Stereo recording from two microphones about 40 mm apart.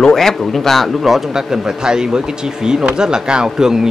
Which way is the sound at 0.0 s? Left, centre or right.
Centre.